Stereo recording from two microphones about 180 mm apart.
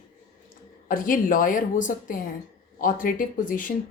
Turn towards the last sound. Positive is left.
turn(degrees=50)  # may be behind; listen again after turning